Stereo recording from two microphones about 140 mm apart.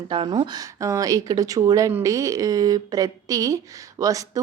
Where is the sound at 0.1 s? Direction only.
35° right (ahead or behind).